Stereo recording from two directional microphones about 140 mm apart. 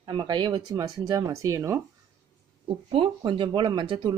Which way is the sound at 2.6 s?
35° right (ahead or behind).